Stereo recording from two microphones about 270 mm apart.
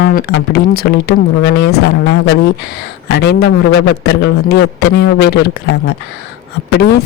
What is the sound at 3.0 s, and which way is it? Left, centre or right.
Speech, left.